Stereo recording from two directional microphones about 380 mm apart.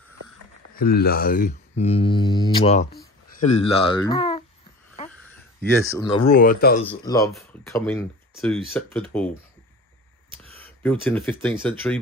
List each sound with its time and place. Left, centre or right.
0.7 s speech: left
5.6 s speech: centre
6.3 s speech: left
6.9 s speech: centre
10.3 s a sound: centre
10.8 s speech: centre